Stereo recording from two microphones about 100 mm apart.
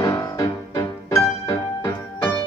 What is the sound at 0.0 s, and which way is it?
Music, 35° left (ahead or behind).